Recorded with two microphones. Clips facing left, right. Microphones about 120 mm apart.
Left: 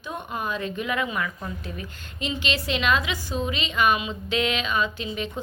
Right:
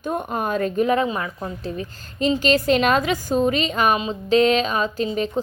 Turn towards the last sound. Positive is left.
turn(degrees=-40)  # may be behind; listen again after turning